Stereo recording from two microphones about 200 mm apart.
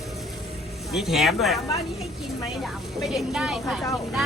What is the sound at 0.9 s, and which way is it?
Speech, centre (ahead or behind).